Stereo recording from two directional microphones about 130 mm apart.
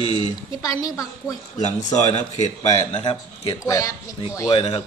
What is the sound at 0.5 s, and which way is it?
Speech, 25° left (ahead or behind).